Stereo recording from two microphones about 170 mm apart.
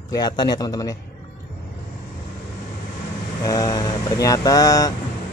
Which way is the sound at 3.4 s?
20° left (ahead or behind).